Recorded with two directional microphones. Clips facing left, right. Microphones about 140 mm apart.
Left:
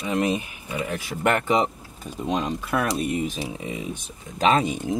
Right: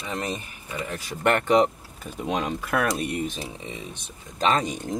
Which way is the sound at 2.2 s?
5° right (ahead or behind).